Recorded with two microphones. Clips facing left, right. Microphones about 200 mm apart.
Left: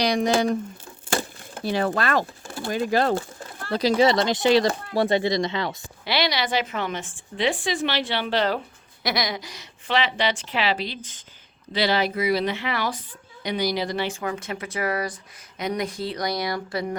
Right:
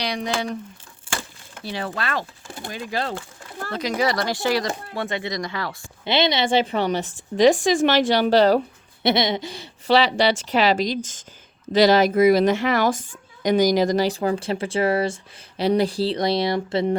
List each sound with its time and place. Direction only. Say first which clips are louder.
0.0 s speech: left 5 dB; 45° left (ahead or behind)
1.1 s a sound: left 6 dB; 45° left (ahead or behind)
2.7 s speech: left 6 dB; 45° left (ahead or behind)
3.7 s speech: left 4 dB; 35° left (ahead or behind)
4.9 s speech: left 8 dB; 35° left (ahead or behind)
6.1 s a woman's voice: right 4 dB; 20° right (ahead or behind); by 8.6 s 40° right (ahead or behind)
9.0 s a woman's voice: right 6 dB; 25° right (ahead or behind)